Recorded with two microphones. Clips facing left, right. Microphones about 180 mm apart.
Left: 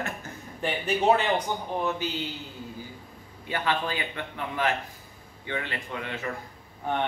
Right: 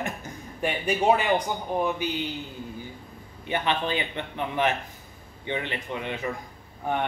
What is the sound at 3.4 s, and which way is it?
A man's voice, 20° right (ahead or behind).